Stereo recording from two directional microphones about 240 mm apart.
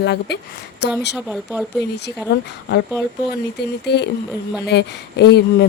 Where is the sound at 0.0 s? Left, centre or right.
Left.